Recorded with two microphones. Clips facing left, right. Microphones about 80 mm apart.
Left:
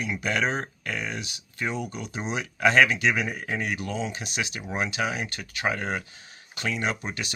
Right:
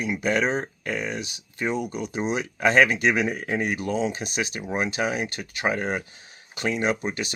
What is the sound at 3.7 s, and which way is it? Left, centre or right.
Speech, right.